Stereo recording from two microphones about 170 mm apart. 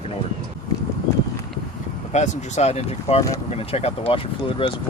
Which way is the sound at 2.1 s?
45° left (ahead or behind).